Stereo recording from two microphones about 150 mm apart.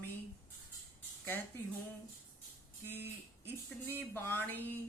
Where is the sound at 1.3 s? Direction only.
15° left (ahead or behind).